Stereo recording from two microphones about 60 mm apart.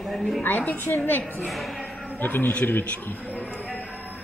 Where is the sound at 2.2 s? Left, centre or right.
Left.